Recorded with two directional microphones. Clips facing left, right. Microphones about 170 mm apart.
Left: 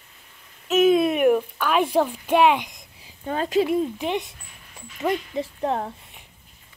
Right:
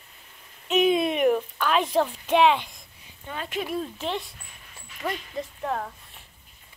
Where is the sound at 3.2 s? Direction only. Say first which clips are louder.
Left 10 dB; 40° left (ahead or behind).